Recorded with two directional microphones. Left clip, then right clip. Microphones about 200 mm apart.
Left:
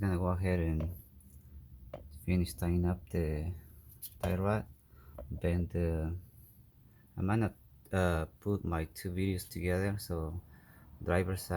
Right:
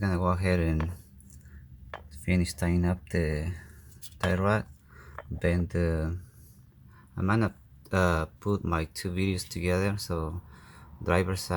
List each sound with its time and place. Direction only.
0.0 s speech: 10° right (ahead or behind)
2.2 s speech: 10° right (ahead or behind)
7.2 s speech: 10° right (ahead or behind)